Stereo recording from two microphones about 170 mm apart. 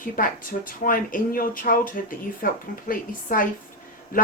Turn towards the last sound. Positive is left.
turn(degrees=55)  # may be behind; listen again after turning